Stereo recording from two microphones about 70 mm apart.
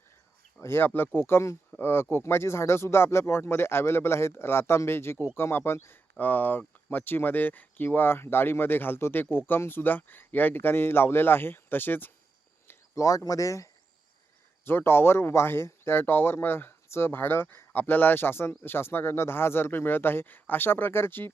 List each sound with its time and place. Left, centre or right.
0.6 s speech: left
12.6 s speech: left
14.6 s speech: left